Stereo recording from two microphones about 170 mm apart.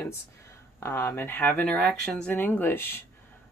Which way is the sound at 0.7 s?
15° left (ahead or behind).